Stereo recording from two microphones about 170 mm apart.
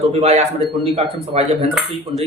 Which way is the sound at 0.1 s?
40° right (ahead or behind).